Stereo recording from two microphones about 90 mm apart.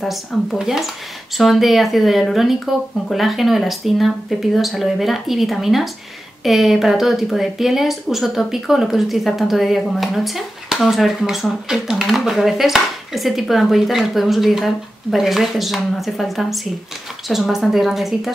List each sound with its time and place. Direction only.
0.0 s speech: centre (ahead or behind)